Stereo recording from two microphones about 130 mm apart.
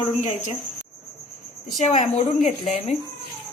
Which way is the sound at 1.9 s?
60° left (ahead or behind).